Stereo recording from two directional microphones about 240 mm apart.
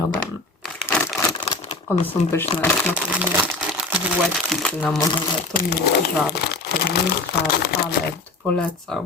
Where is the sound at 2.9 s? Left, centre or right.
Centre.